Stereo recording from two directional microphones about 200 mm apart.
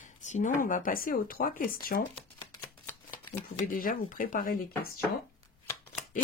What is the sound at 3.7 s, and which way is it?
Speech, 45° left (ahead or behind).